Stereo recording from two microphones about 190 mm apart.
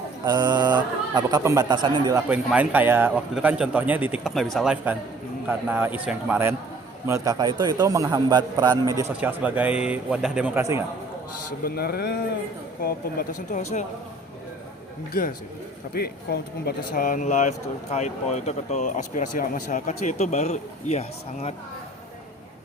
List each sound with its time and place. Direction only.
0.3 s a man's voice: 20° right (ahead or behind)
2.3 s a man's voice: 5° right (ahead or behind)
11.6 s speech: 55° left (ahead or behind); by 13.8 s 40° left (ahead or behind)
15.9 s speech: 55° left (ahead or behind); by 21.5 s 35° left (ahead or behind)